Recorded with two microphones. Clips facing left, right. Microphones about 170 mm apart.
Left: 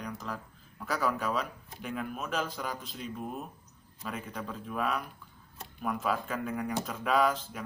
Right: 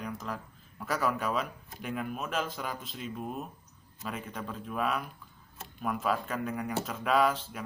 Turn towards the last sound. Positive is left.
turn(degrees=0)  # may be behind; listen again after turning